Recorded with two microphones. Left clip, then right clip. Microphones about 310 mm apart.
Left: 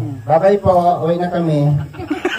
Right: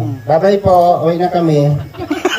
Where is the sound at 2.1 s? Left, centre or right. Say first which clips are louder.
Right 4 dB; centre.